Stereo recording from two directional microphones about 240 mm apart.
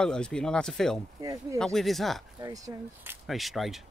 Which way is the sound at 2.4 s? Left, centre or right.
Centre.